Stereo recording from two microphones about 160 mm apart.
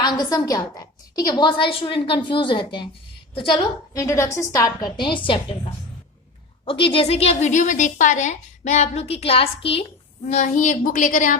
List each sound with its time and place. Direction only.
0.0 s a woman's voice: 25° left (ahead or behind)
6.7 s a woman's voice: 35° left (ahead or behind); by 11.3 s 55° left (ahead or behind)